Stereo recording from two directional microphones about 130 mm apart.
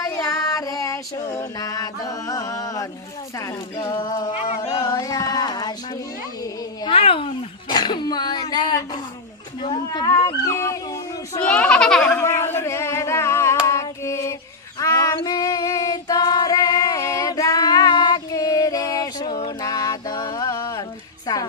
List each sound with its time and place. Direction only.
0.0 s music: 20° left (ahead or behind)
3.3 s speech: 25° left (ahead or behind)
4.6 s a sound: 25° left (ahead or behind)
6.9 s speech: 45° left (ahead or behind)
7.7 s speech: 35° left (ahead or behind)
11.4 s a child's voice: 10° left (ahead or behind)
12.2 s singing: 20° left (ahead or behind)
14.8 s female singing: 25° left (ahead or behind)
21.3 s music: 25° left (ahead or behind)